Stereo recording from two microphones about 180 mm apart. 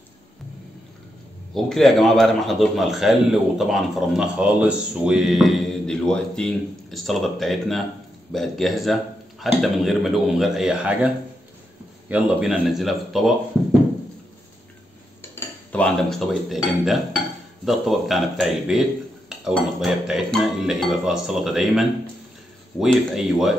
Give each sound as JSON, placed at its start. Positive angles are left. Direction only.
{"t": 1.5, "sound": "a man's voice", "side_deg": 0}
{"t": 12.1, "sound": "a man's voice", "side_deg": -5}
{"t": 15.3, "sound": "a man's voice", "side_deg": 5}